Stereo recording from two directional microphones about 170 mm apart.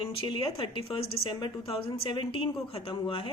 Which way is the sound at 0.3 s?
30° left (ahead or behind).